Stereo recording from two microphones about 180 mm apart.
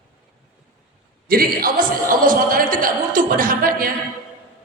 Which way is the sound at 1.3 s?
55° right (ahead or behind).